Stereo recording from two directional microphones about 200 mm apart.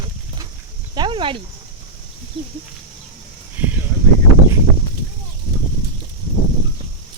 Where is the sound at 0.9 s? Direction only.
25° right (ahead or behind).